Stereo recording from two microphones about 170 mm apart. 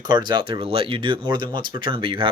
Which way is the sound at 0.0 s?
25° right (ahead or behind).